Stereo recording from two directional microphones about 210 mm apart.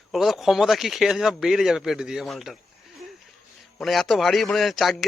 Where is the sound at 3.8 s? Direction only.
Centre (ahead or behind).